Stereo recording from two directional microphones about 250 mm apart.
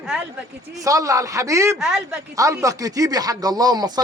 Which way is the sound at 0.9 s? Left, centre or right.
Centre.